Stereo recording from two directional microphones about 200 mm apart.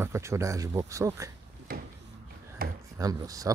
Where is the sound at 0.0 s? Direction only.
15° right (ahead or behind).